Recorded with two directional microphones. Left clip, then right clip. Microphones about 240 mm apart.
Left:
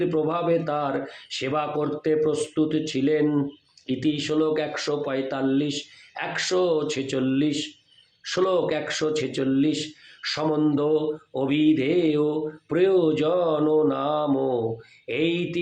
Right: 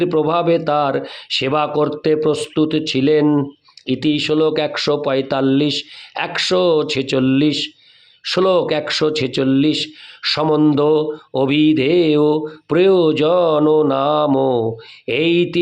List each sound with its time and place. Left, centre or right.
0.0 s speech: right